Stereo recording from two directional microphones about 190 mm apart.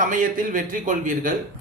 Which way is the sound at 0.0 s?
45° right (ahead or behind).